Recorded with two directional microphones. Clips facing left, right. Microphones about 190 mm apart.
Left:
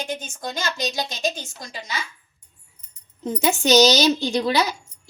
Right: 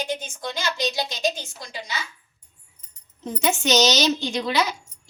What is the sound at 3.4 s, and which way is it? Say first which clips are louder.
A woman's voice: left 4 dB; 35° left (ahead or behind).